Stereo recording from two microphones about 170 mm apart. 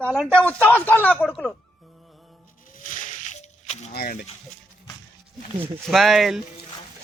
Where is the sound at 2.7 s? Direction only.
50° left (ahead or behind).